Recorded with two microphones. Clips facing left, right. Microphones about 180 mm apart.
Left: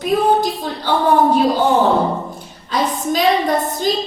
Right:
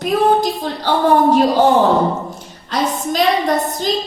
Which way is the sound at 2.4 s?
45° right (ahead or behind).